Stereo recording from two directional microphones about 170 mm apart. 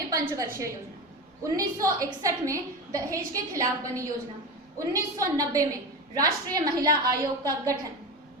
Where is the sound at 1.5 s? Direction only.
20° right (ahead or behind).